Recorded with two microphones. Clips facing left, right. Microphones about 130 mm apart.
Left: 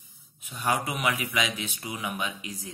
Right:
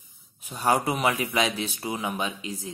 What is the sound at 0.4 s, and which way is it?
Speech, 35° right (ahead or behind).